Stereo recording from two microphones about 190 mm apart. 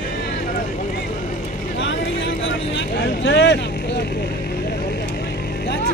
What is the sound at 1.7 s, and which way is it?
Vehicle, 75° left (ahead or behind).